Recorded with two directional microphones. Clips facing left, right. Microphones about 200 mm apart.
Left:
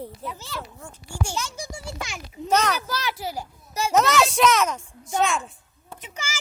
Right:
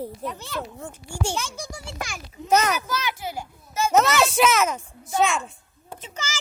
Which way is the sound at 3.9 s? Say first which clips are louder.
Even; centre (ahead or behind).